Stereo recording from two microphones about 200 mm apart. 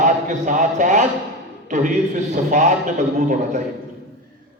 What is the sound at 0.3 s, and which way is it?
A man's voice, 40° right (ahead or behind).